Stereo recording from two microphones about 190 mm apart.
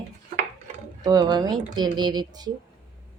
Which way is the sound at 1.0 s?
20° right (ahead or behind).